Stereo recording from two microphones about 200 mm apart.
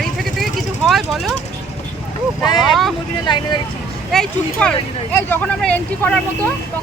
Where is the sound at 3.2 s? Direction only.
25° left (ahead or behind).